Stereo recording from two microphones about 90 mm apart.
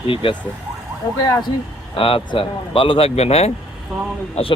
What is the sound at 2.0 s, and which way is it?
Speech, 90° left.